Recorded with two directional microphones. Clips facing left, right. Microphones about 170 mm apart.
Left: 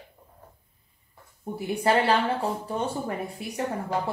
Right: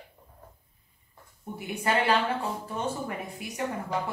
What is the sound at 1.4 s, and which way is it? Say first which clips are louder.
Speech: left 6 dB; 35° left (ahead or behind).